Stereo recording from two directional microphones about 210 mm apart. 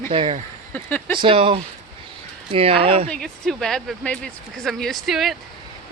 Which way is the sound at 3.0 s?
5° left (ahead or behind).